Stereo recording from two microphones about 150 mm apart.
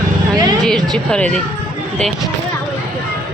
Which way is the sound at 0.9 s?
5° left (ahead or behind).